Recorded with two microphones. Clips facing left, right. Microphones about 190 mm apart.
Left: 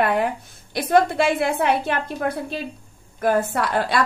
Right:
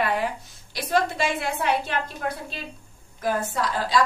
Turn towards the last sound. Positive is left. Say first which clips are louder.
# left 2 dB
turn(degrees=60)  # may be behind; listen again after turning